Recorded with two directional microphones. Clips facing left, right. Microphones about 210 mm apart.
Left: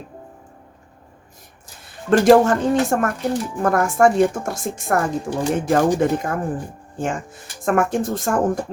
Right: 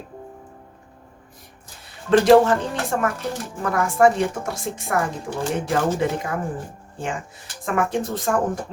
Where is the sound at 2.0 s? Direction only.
45° left (ahead or behind).